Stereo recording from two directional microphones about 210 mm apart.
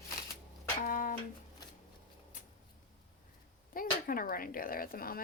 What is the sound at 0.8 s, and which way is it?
Music, 40° left (ahead or behind).